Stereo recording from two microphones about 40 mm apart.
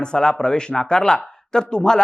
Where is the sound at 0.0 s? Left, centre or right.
Centre.